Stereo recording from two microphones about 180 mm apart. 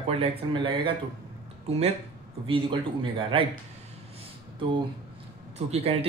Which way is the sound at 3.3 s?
30° right (ahead or behind).